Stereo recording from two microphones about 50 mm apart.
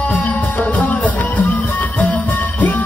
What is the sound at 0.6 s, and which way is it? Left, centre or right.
Music, left.